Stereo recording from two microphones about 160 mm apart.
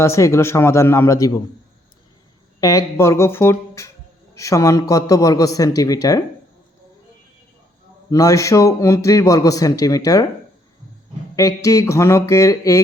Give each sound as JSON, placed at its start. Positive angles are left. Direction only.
{"t": 0.0, "sound": "speech", "side_deg": 15}
{"t": 2.6, "sound": "a man's voice", "side_deg": 20}
{"t": 8.1, "sound": "a man's voice", "side_deg": 20}
{"t": 11.3, "sound": "a man's voice", "side_deg": 20}